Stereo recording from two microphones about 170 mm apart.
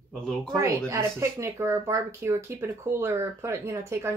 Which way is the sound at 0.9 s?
15° right (ahead or behind).